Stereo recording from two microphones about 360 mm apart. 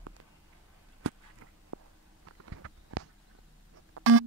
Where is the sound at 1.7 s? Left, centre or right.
Right.